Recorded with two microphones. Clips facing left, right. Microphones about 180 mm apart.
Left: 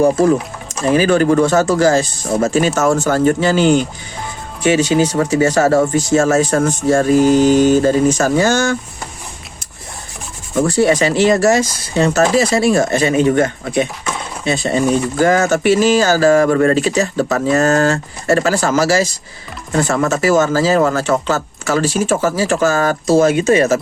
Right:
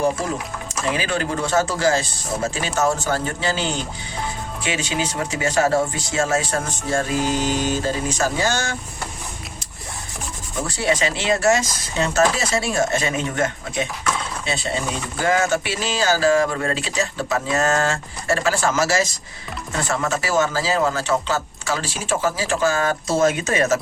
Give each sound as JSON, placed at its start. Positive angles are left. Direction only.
{"t": 0.9, "sound": "speech", "side_deg": 45}
{"t": 10.5, "sound": "speech", "side_deg": 50}
{"t": 14.4, "sound": "speech", "side_deg": 45}